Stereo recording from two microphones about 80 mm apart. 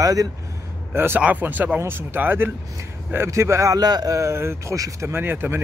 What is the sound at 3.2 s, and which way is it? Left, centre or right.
Speech, right.